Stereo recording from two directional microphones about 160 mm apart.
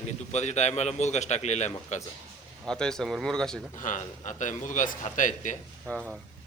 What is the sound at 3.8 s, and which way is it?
A man's voice, 50° left (ahead or behind).